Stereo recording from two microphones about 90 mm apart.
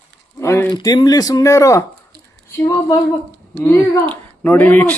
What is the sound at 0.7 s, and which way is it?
Speech, 50° left (ahead or behind).